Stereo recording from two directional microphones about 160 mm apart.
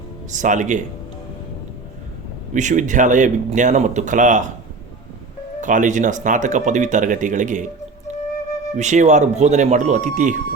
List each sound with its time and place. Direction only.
0.3 s speech: 50° right (ahead or behind)
2.5 s speech: 50° right (ahead or behind)
5.5 s speech: 50° right (ahead or behind)
8.7 s speech: 45° right (ahead or behind)